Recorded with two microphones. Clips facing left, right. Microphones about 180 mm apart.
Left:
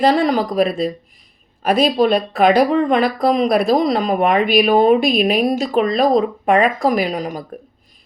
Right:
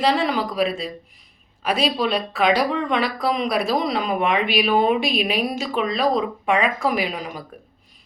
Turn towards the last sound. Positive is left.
turn(degrees=40)  # may be behind; listen again after turning